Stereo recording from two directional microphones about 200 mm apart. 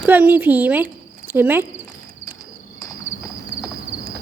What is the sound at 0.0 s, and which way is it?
A woman's voice, 10° right (ahead or behind).